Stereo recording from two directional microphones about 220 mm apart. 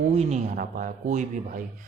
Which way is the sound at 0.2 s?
35° right (ahead or behind).